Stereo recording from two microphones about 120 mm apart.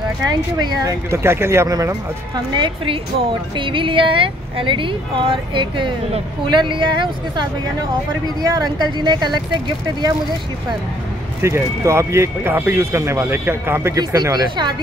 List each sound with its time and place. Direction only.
0.2 s speech: 35° right (ahead or behind)
2.3 s speech: 40° right (ahead or behind)
11.4 s speech: 20° right (ahead or behind)
13.9 s speech: 30° right (ahead or behind)